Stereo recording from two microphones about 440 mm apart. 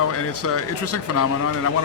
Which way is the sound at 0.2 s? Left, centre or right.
Left.